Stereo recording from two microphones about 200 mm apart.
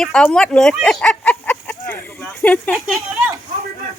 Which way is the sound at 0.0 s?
5° left (ahead or behind).